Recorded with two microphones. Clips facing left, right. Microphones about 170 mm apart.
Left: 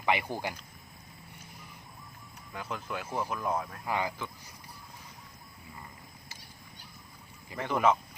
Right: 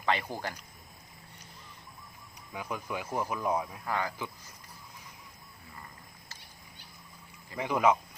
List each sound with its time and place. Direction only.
0.0 s speech: 15° left (ahead or behind)
2.5 s speech: 10° right (ahead or behind)
3.8 s speech: 15° left (ahead or behind)
7.5 s speech: 10° right (ahead or behind)